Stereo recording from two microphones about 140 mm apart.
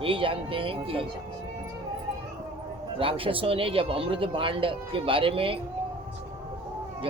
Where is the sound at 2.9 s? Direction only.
40° right (ahead or behind).